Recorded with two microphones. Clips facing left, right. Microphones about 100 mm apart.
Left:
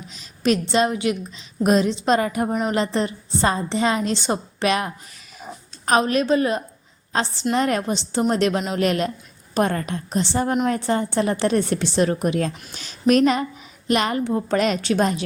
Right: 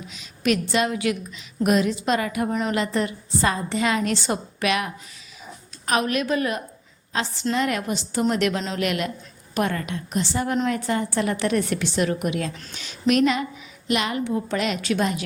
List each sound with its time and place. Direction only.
0.1 s a woman's voice: 35° left (ahead or behind)
5.4 s a sound: 35° left (ahead or behind)
7.1 s a woman's voice: 35° left (ahead or behind)